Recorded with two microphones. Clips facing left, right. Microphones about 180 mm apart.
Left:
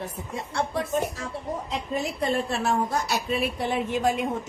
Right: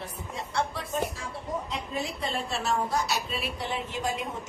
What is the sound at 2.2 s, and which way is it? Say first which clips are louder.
A woman's voice: left 6 dB; 55° left (ahead or behind).